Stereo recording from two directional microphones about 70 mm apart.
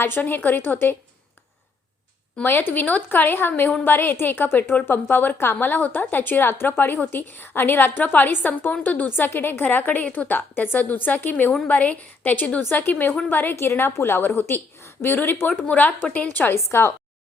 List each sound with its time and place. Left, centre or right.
0.0 s a woman's voice: left
2.4 s a woman's voice: left
16.6 s a woman's voice: left